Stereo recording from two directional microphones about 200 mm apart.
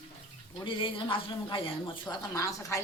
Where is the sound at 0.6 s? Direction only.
25° left (ahead or behind).